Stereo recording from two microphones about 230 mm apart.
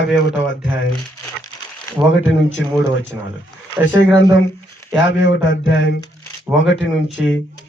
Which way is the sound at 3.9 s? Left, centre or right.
Left.